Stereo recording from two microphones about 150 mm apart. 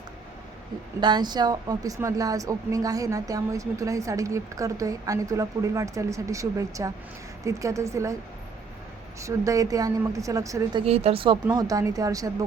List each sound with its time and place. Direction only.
1.0 s a woman's voice: 30° right (ahead or behind)
9.2 s a woman's voice: 20° right (ahead or behind); by 11.3 s 35° right (ahead or behind)
11.5 s a woman's voice: 25° right (ahead or behind)